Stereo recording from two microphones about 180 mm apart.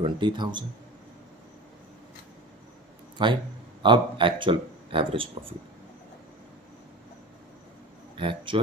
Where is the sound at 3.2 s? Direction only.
25° right (ahead or behind).